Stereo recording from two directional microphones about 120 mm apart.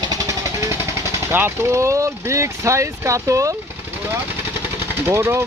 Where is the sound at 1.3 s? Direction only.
20° right (ahead or behind).